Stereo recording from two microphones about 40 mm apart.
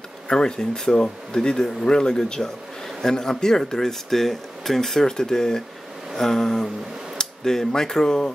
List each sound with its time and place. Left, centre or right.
0.3 s speech: centre